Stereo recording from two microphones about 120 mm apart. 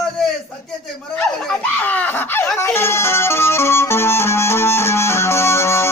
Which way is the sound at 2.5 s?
20° left (ahead or behind).